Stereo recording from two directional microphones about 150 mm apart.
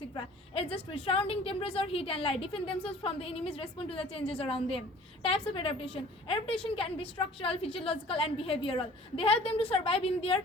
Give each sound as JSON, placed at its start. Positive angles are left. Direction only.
{"t": 0.5, "sound": "a woman's voice", "side_deg": 40}